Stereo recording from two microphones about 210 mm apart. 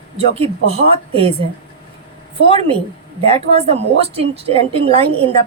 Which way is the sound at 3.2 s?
30° right (ahead or behind).